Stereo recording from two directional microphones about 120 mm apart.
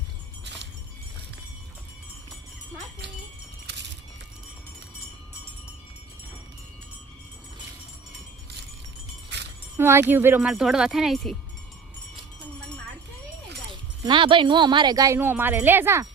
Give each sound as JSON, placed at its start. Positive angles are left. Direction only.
{"t": 9.7, "sound": "speech", "side_deg": -20}
{"t": 10.4, "sound": "speech", "side_deg": -5}
{"t": 14.0, "sound": "speech", "side_deg": -40}
{"t": 15.2, "sound": "speech", "side_deg": -15}